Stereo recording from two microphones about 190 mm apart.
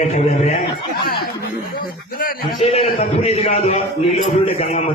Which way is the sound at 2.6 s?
35° left (ahead or behind).